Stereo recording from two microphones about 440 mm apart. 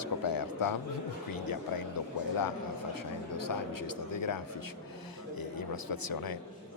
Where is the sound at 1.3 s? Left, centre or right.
Left.